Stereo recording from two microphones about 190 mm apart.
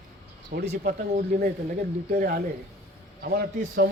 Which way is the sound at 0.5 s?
45° right (ahead or behind).